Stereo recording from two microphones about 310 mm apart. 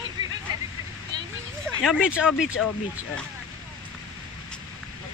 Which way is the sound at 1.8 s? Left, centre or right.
Centre.